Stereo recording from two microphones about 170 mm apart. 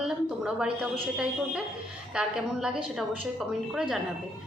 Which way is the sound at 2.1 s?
5° right (ahead or behind).